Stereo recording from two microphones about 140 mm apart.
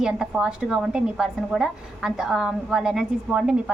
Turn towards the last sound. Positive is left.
turn(degrees=-5)  # may be behind; listen again after turning